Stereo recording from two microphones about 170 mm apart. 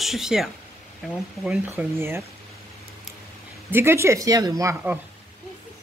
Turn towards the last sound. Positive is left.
turn(degrees=-20)  # may be behind; listen again after turning